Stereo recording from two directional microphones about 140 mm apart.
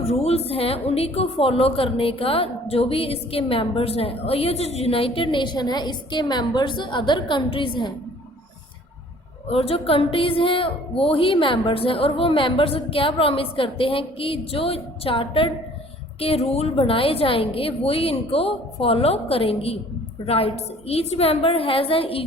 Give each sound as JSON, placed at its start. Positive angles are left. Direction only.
{"t": 0.1, "sound": "a woman's voice", "side_deg": 45}
{"t": 9.5, "sound": "a woman's voice", "side_deg": 45}